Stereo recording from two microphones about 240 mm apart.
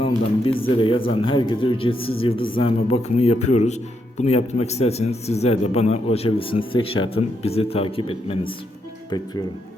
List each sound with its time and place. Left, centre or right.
0.4 s a man's voice: left